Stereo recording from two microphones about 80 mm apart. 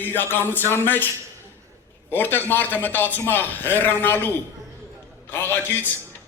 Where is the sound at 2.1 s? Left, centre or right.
Left.